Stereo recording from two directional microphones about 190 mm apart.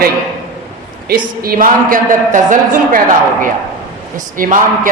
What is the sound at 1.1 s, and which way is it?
A man's voice, 50° right (ahead or behind).